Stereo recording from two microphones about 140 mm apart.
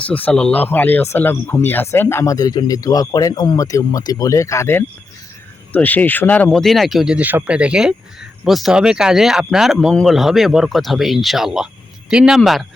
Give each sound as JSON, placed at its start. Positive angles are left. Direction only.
{"t": 0.0, "sound": "speech", "side_deg": 10}
{"t": 6.5, "sound": "speech", "side_deg": 0}